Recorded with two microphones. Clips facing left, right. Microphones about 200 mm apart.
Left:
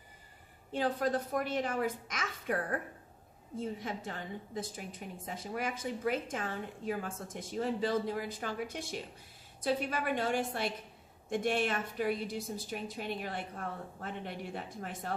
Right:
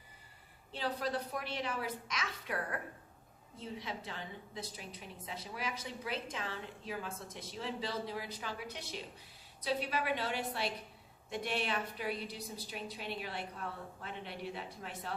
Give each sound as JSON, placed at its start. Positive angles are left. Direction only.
{"t": 0.7, "sound": "a woman's voice", "side_deg": 50}